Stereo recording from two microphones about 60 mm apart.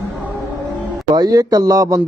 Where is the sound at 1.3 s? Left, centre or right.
Right.